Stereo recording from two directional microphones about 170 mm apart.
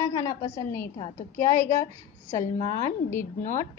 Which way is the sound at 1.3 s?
10° left (ahead or behind).